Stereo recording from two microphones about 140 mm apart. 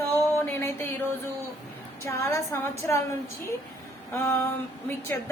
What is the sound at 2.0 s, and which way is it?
Speech, 20° left (ahead or behind).